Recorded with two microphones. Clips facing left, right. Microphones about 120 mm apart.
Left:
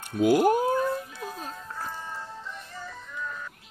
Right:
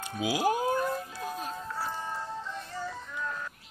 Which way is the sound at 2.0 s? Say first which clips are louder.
Right 3 dB; 15° right (ahead or behind).